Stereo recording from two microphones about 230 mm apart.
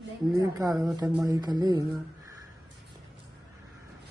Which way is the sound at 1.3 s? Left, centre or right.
Centre.